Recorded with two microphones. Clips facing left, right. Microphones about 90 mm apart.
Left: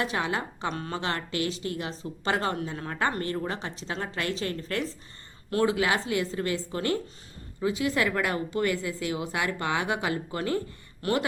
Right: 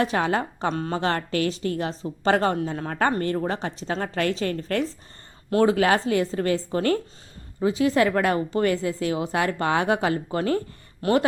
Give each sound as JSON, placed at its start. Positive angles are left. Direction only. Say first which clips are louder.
{"t": 0.0, "sound": "a woman's voice", "louder": "right 6 dB", "side_deg": -40}